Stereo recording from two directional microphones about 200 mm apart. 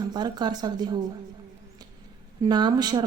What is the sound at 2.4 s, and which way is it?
Speech, 20° right (ahead or behind).